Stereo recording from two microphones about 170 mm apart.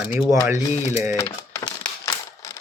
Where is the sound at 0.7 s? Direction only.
40° left (ahead or behind).